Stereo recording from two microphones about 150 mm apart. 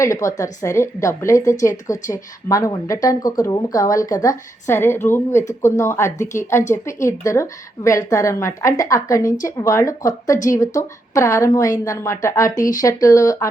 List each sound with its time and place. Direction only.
0.0 s a woman's voice: 20° left (ahead or behind)